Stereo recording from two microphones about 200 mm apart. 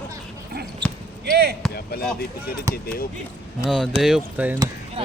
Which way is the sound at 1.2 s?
55° right (ahead or behind).